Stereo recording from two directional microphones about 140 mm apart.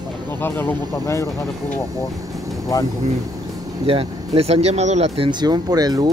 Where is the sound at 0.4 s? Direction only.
15° left (ahead or behind).